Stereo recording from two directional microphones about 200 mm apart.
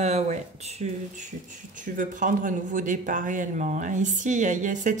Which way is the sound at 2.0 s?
40° right (ahead or behind).